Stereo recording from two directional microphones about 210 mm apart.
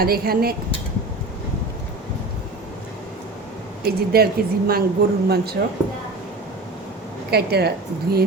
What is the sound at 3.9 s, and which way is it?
A woman's voice, 45° right (ahead or behind).